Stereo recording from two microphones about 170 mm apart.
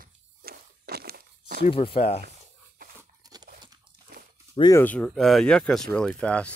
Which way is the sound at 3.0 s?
20° right (ahead or behind).